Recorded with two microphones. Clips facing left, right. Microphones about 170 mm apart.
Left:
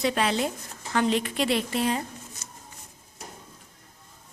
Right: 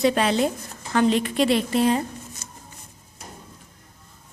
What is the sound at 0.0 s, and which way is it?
A woman's voice, 35° right (ahead or behind).